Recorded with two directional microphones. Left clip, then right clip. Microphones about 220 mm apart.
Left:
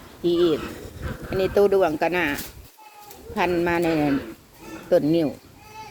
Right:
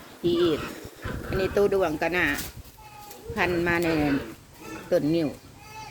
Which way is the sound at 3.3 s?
5° left (ahead or behind).